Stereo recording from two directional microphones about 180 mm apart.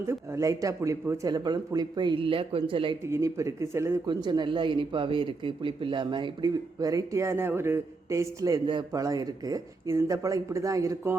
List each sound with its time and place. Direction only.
0.0 s speech: 15° right (ahead or behind)
3.1 s speech: 15° right (ahead or behind)